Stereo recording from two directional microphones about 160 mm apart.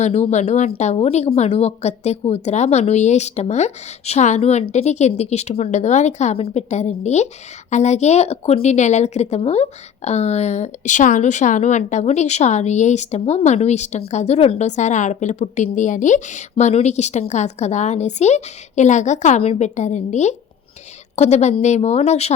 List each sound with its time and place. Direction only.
0.0 s a woman's voice: 45° left (ahead or behind)